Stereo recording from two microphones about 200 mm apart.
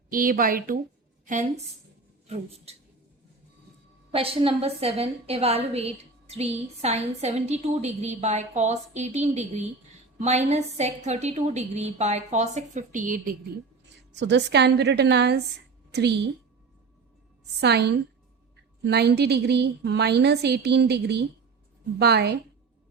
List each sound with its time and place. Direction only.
0.1 s a woman's voice: 45° right (ahead or behind)
4.1 s a woman's voice: 30° right (ahead or behind)
14.1 s a woman's voice: 60° right (ahead or behind)
17.6 s a woman's voice: 55° right (ahead or behind)